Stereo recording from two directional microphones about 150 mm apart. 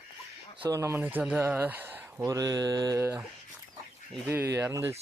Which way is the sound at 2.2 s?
25° right (ahead or behind).